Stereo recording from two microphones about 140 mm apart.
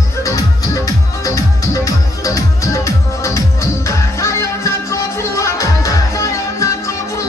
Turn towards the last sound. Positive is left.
turn(degrees=20)  # may be behind; listen again after turning